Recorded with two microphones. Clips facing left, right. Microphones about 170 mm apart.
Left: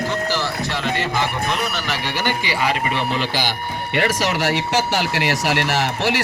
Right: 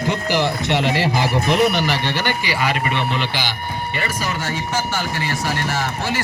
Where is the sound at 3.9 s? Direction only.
80° left.